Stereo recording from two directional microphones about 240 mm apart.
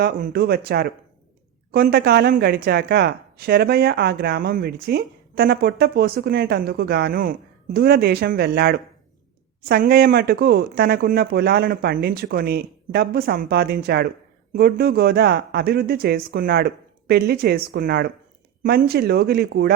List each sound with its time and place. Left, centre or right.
0.0 s speech: right